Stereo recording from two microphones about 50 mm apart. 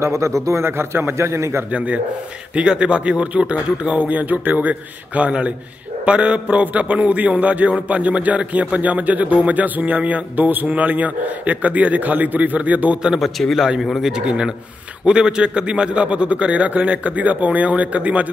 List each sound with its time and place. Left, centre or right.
0.0 s speech: right
0.7 s a man's voice: right
1.7 s a man's voice: right
4.1 s a man's voice: right
6.4 s a man's voice: right
13.2 s a man's voice: centre
13.6 s a man's voice: centre; by 18.2 s right